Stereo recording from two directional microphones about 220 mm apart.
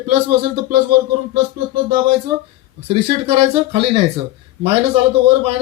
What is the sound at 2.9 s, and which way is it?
A man's voice, 25° right (ahead or behind).